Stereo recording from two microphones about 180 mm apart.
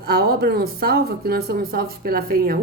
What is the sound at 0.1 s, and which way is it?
Speech, 60° right (ahead or behind).